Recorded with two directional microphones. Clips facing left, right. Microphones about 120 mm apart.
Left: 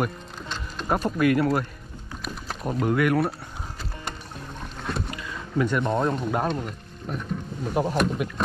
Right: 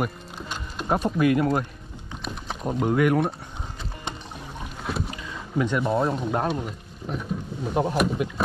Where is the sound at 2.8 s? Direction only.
20° right (ahead or behind).